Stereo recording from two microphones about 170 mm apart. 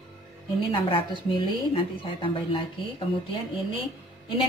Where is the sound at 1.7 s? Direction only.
30° left (ahead or behind).